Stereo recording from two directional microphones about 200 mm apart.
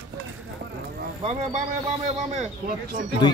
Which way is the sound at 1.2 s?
30° right (ahead or behind).